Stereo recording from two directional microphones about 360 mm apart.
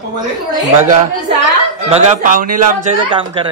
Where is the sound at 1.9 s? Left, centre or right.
Centre.